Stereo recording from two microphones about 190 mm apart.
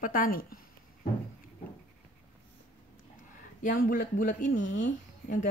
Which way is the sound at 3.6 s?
45° left (ahead or behind).